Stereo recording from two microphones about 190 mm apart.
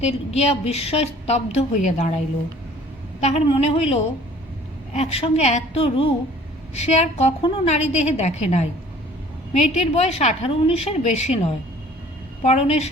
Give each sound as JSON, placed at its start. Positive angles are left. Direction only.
{"t": 0.3, "sound": "a woman's voice", "side_deg": 35}